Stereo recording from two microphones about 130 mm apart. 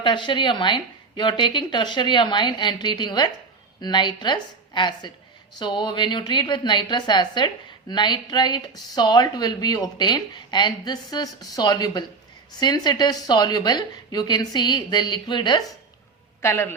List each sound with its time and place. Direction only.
0.0 s a woman's voice: 40° left (ahead or behind)
16.4 s a man's voice: 20° left (ahead or behind)